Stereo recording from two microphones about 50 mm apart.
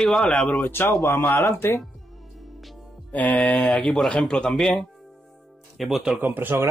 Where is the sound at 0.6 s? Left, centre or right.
Left.